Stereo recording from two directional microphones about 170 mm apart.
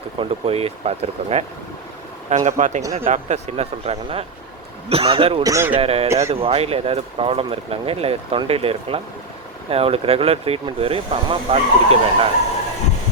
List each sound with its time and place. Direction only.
0.2 s a man's voice: 35° right (ahead or behind)
5.4 s a man's voice: 20° right (ahead or behind)
5.7 s speech: 35° right (ahead or behind)